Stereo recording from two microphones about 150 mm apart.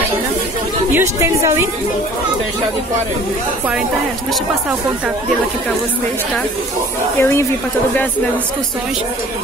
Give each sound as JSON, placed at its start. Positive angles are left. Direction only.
{"t": 0.9, "sound": "a woman's voice", "side_deg": -20}
{"t": 7.2, "sound": "speech", "side_deg": 15}